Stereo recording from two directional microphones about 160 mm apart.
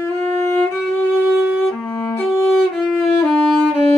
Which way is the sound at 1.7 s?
Centre (ahead or behind).